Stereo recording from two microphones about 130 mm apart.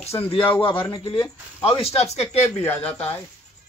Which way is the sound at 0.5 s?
40° left (ahead or behind).